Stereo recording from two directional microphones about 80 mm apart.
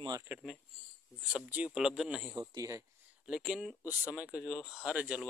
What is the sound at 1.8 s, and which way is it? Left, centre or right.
Speech, centre.